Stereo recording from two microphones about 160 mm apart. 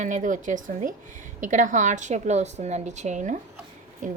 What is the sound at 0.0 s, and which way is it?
A woman's voice, 55° right (ahead or behind).